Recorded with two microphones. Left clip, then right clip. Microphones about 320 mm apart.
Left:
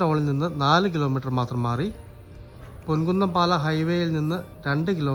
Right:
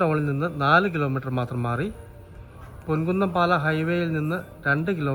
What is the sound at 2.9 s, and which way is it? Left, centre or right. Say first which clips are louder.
Speech: even; centre.